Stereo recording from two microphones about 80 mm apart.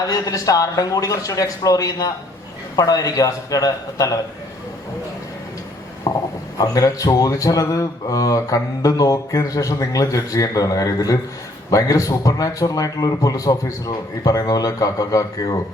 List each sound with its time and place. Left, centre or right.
0.1 s speech: left
6.1 s a sound: left
6.6 s speech: left